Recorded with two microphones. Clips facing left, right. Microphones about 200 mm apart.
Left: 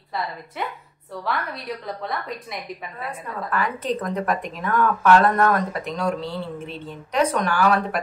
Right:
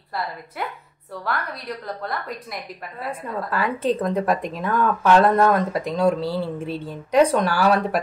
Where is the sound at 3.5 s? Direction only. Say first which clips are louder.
Right 2 dB; 30° right (ahead or behind).